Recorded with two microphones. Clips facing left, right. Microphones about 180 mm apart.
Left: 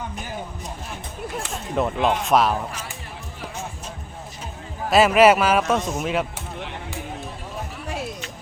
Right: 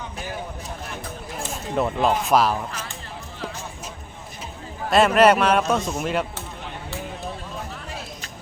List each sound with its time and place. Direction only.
1.7 s speech: centre (ahead or behind)
4.9 s speech: 5° left (ahead or behind)